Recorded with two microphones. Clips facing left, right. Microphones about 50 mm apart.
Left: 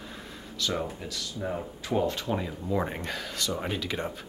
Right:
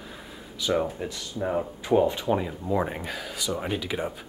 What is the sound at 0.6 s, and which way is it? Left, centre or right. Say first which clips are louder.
Speech: right 5 dB; centre.